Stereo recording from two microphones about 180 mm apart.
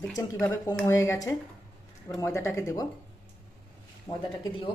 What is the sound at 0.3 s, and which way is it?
Speech, 15° left (ahead or behind).